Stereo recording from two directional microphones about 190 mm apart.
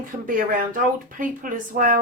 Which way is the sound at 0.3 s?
45° right (ahead or behind).